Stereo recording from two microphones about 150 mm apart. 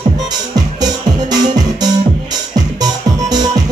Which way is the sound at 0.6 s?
25° right (ahead or behind).